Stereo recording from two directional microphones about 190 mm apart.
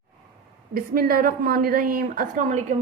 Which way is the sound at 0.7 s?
50° right (ahead or behind).